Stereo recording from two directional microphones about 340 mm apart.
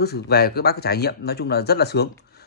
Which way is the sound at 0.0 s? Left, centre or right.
Left.